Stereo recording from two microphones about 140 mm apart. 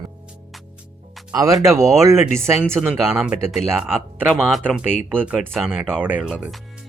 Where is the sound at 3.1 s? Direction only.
5° right (ahead or behind).